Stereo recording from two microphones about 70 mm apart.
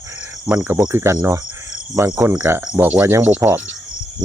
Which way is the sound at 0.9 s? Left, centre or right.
Right.